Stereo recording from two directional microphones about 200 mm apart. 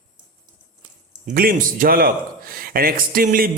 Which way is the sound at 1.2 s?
45° right (ahead or behind).